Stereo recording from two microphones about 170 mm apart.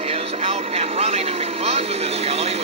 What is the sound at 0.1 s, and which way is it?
Speech, 35° right (ahead or behind).